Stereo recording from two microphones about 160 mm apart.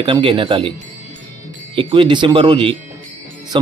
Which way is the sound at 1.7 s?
35° right (ahead or behind).